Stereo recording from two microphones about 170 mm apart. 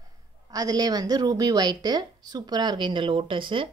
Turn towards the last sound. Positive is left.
turn(degrees=-30)  # may be behind; listen again after turning